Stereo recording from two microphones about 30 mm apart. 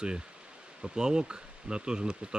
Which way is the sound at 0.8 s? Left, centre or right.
Right.